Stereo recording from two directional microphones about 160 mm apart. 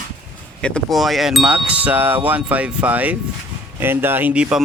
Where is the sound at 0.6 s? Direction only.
5° left (ahead or behind); by 3.1 s 10° right (ahead or behind).